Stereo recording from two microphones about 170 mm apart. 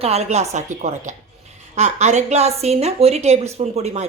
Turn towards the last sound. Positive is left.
turn(degrees=-40)  # may be behind; listen again after turning